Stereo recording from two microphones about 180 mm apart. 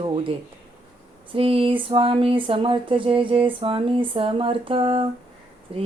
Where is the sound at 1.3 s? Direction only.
30° right (ahead or behind).